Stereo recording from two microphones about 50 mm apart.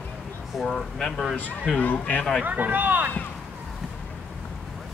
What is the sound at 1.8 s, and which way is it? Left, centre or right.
Speech, left.